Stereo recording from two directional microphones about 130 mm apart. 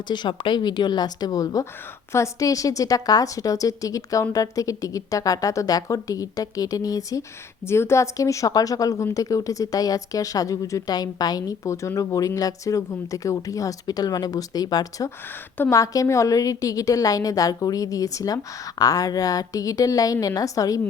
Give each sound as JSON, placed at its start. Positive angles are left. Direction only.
{"t": 0.1, "sound": "a woman's voice", "side_deg": 35}